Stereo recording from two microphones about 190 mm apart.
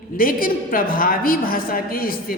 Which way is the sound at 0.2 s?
45° left (ahead or behind).